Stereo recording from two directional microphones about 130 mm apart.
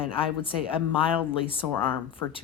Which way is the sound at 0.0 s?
45° left (ahead or behind).